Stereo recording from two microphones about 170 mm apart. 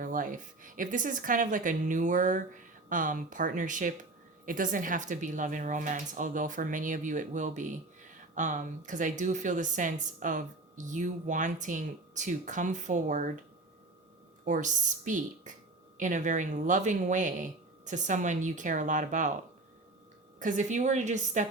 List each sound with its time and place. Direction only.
0.0 s speech: 50° right (ahead or behind)
14.4 s speech: 45° right (ahead or behind)
20.4 s speech: 45° right (ahead or behind)